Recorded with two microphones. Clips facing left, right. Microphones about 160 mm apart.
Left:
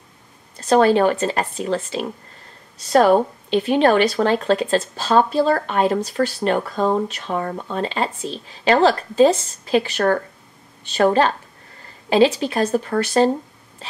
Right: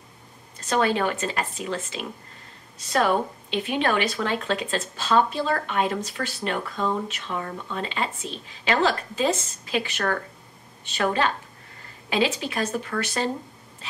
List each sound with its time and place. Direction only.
0.7 s speech: 35° left (ahead or behind)